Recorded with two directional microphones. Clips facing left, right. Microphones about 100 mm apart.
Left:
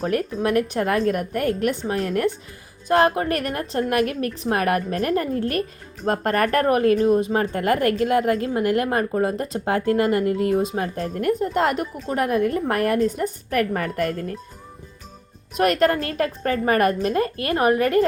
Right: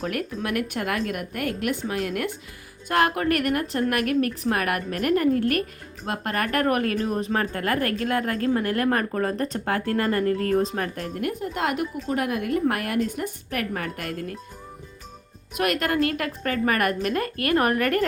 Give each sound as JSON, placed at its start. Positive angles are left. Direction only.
{"t": 0.0, "sound": "a woman's voice", "side_deg": 35}
{"t": 10.5, "sound": "speech", "side_deg": 5}
{"t": 10.9, "sound": "a woman's voice", "side_deg": 35}
{"t": 15.5, "sound": "speech", "side_deg": 35}